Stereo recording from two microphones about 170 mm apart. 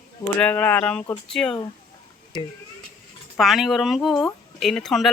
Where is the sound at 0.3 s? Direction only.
10° left (ahead or behind).